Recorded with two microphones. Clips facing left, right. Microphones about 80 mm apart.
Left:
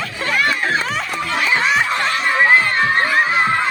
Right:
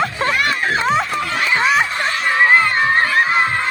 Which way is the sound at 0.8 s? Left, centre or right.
Right.